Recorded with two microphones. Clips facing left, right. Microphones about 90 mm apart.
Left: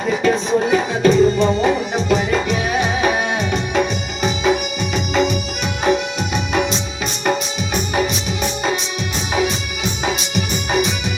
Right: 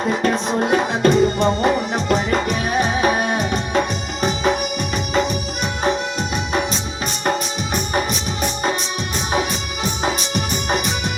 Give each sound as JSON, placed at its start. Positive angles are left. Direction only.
{"t": 0.1, "sound": "music", "side_deg": -50}
{"t": 10.0, "sound": "music", "side_deg": -40}